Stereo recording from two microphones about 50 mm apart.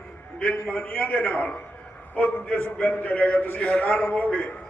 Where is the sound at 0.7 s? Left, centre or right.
Left.